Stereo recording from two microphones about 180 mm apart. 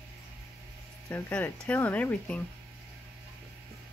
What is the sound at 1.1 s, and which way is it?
Speech, 10° left (ahead or behind).